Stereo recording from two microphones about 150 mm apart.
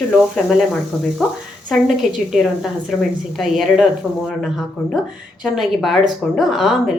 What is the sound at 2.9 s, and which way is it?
Speech, 5° left (ahead or behind).